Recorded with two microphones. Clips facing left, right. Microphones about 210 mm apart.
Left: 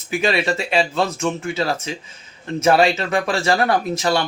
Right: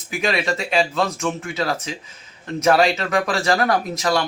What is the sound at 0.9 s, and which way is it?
Speech, centre (ahead or behind).